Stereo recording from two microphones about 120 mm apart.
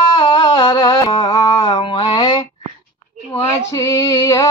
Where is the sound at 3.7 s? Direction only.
30° left (ahead or behind).